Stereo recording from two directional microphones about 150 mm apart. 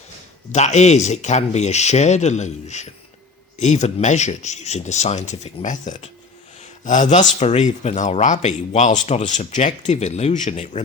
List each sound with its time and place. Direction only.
0.5 s speech: 50° left (ahead or behind)